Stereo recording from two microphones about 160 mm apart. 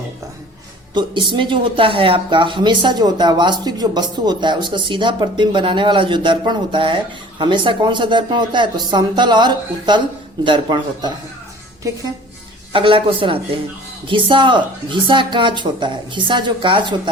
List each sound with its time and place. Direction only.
0.9 s speech: 30° right (ahead or behind)
12.7 s speech: 35° right (ahead or behind)